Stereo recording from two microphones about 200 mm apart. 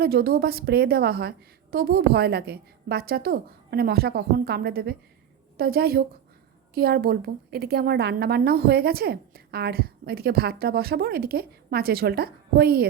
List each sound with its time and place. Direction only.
0.0 s a woman's voice: 50° right (ahead or behind)